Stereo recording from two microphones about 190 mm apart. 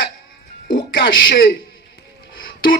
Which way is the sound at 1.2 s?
50° left (ahead or behind).